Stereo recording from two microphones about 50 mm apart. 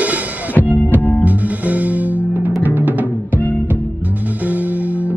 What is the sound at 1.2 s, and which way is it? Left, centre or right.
Music, right.